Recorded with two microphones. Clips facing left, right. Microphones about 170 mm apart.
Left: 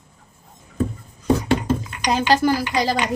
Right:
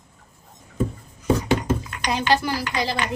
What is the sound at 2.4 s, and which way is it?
Speech, 40° left (ahead or behind).